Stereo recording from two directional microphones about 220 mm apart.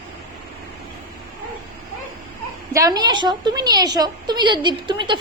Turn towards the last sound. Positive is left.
turn(degrees=-20)  # may be behind; listen again after turning